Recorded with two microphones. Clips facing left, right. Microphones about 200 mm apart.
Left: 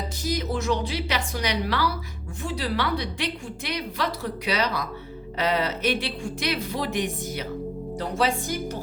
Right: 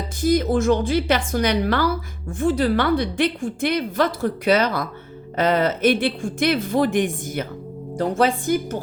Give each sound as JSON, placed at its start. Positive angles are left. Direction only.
{"t": 0.2, "sound": "a woman's voice", "side_deg": -50}